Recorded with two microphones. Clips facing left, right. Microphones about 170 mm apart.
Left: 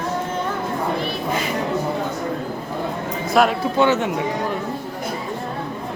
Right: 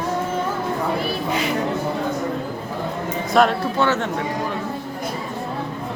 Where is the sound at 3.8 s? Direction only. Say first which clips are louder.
Left 4 dB; 15° left (ahead or behind).